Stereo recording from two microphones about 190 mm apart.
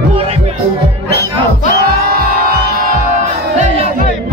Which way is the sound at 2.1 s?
50° right (ahead or behind).